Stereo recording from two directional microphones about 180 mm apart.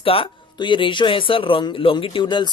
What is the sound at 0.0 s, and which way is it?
Speech, 30° left (ahead or behind).